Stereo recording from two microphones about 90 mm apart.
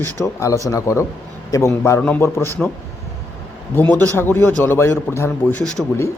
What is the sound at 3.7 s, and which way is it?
Speech, 20° left (ahead or behind).